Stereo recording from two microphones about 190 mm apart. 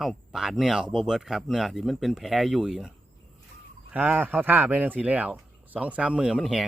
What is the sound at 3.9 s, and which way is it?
Speech, 10° right (ahead or behind).